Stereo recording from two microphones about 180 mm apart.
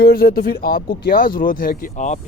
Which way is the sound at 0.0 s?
55° left (ahead or behind).